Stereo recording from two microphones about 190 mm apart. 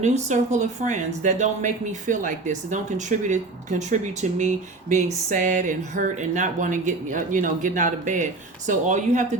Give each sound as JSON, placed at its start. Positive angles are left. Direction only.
{"t": 0.0, "sound": "speech", "side_deg": -35}